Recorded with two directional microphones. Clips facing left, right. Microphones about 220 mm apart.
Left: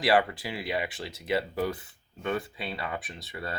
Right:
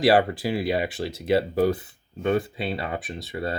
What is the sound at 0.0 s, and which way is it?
Speech, 35° right (ahead or behind).